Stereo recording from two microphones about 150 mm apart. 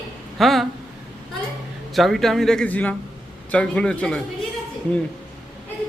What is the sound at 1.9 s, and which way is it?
A man's voice, centre (ahead or behind).